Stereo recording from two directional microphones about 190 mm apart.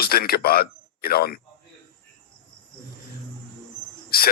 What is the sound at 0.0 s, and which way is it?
Speech, 55° left (ahead or behind).